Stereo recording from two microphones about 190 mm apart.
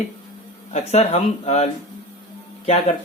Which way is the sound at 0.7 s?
35° left (ahead or behind).